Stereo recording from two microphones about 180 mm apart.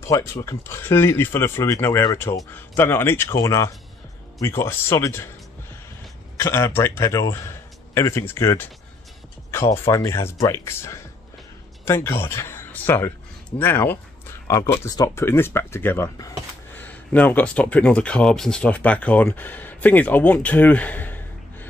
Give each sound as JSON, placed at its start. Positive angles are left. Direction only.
{"t": 0.0, "sound": "speech", "side_deg": 15}
{"t": 6.3, "sound": "a man's voice", "side_deg": 15}
{"t": 9.8, "sound": "speech", "side_deg": 15}